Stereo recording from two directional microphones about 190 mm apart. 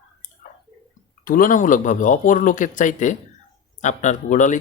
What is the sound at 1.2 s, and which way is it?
Speech, 45° left (ahead or behind).